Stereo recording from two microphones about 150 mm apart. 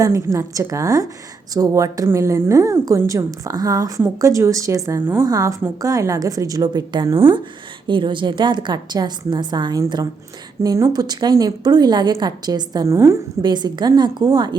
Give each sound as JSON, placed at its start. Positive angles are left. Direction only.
{"t": 0.0, "sound": "a woman's voice", "side_deg": -20}
{"t": 13.4, "sound": "a woman's voice", "side_deg": -30}